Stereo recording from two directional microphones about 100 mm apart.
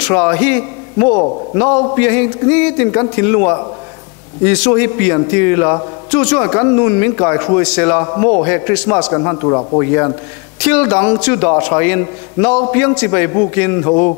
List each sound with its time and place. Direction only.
0.0 s a man's voice: 15° left (ahead or behind)